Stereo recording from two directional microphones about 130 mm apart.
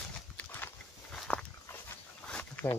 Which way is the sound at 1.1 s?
5° left (ahead or behind).